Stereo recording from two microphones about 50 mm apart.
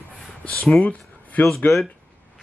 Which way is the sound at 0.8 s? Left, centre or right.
Left.